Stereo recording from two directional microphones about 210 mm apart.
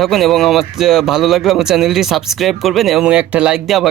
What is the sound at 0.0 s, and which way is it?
Speech, centre (ahead or behind).